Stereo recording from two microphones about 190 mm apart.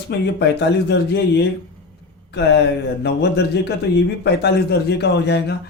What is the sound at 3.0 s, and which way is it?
Speech, 60° left (ahead or behind).